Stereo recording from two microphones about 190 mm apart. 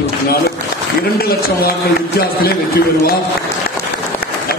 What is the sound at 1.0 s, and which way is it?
A man's voice, 50° left (ahead or behind).